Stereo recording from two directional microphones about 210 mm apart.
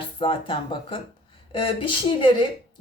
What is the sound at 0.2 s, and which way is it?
A woman's voice, 25° left (ahead or behind).